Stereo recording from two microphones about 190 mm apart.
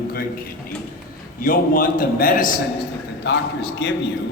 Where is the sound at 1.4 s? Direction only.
50° left (ahead or behind).